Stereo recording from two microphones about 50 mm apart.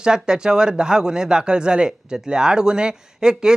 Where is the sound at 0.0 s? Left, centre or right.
Centre.